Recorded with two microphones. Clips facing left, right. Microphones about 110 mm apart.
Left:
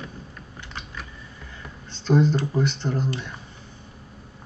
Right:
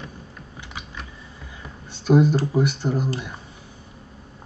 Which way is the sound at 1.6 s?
10° right (ahead or behind).